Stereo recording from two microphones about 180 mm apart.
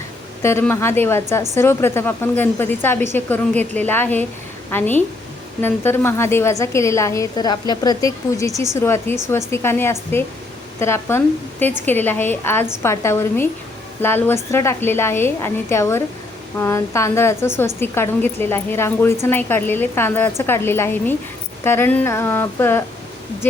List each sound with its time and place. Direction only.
0.4 s a woman's voice: 15° left (ahead or behind)